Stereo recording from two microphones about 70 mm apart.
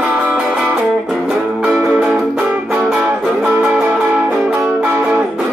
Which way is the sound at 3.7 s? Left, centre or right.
Centre.